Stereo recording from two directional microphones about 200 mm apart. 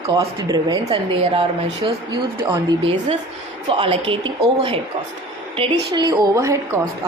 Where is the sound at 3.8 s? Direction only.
25° right (ahead or behind).